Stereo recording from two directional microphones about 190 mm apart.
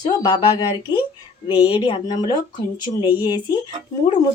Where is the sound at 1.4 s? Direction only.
20° left (ahead or behind).